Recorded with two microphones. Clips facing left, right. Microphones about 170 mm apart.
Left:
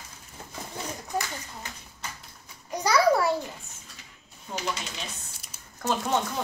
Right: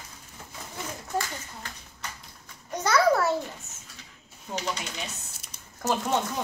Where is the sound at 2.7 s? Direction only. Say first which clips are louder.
Even; 10° left (ahead or behind).